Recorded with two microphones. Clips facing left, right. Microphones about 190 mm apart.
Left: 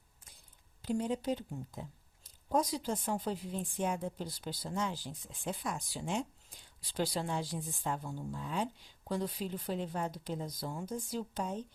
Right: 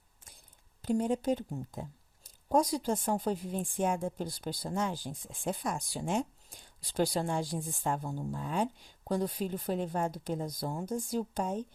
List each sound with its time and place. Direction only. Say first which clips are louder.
0.8 s speech: right 4 dB; 45° right (ahead or behind)